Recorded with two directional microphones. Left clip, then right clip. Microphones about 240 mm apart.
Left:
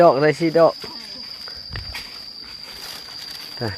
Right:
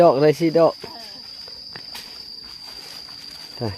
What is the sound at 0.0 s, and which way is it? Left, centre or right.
Speech, right.